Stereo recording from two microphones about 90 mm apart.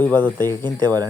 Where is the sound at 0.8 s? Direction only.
45° right (ahead or behind).